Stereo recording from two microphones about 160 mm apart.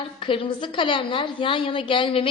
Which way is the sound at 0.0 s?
35° left (ahead or behind).